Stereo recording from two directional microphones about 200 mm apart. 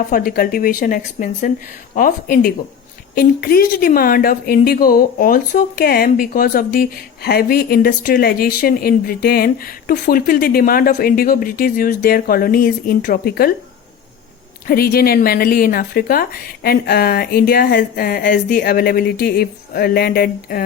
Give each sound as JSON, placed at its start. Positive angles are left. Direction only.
{"t": 0.1, "sound": "a woman's voice", "side_deg": 45}
{"t": 14.7, "sound": "a woman's voice", "side_deg": 50}